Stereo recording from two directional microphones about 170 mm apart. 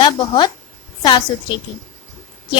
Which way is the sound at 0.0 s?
30° left (ahead or behind).